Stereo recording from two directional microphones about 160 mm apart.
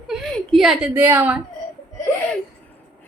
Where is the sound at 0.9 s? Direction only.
15° right (ahead or behind).